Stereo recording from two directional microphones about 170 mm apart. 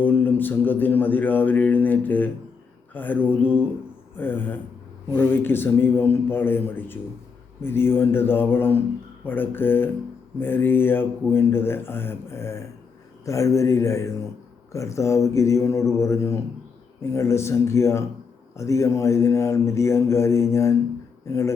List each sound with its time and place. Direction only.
0.0 s a man's voice: 10° left (ahead or behind)